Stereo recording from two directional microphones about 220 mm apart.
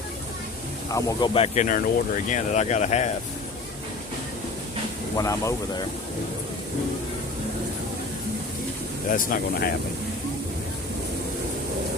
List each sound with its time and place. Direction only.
0.9 s speech: 15° left (ahead or behind); by 3.1 s 30° left (ahead or behind)
5.1 s speech: 15° left (ahead or behind)
9.0 s speech: 40° left (ahead or behind)